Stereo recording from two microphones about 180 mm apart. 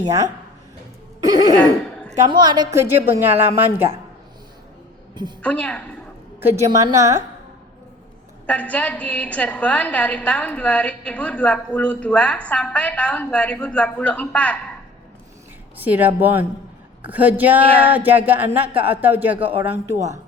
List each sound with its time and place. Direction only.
0.0 s a woman's voice: 20° right (ahead or behind)
1.2 s a sound: 20° right (ahead or behind)
2.1 s a woman's voice: 25° right (ahead or behind)
2.7 s speech: 10° right (ahead or behind)
5.4 s a woman's voice: 10° left (ahead or behind)
6.4 s a woman's voice: 15° right (ahead or behind)
8.4 s a woman's voice: 10° left (ahead or behind)
15.8 s speech: 10° right (ahead or behind)